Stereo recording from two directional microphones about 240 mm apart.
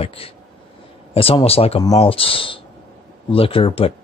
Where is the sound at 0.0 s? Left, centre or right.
Left.